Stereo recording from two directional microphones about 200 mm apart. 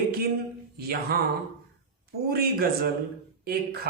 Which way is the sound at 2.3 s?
50° right (ahead or behind).